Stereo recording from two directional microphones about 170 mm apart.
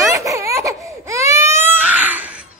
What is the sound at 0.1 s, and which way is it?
Baby cry, 15° right (ahead or behind).